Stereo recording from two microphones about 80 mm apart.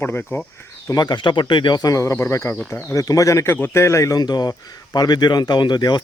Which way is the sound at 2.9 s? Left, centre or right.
Left.